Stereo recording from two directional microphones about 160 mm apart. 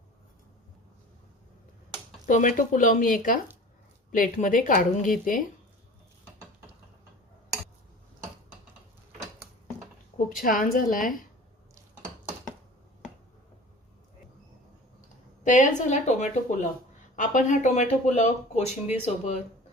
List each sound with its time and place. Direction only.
2.2 s speech: 55° left (ahead or behind)
10.2 s speech: 60° left (ahead or behind)
15.4 s speech: 50° left (ahead or behind)